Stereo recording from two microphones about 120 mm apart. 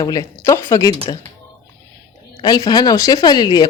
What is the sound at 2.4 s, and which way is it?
Speech, 35° left (ahead or behind).